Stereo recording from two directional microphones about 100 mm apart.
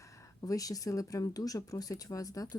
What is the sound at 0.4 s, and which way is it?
Speech, 35° left (ahead or behind).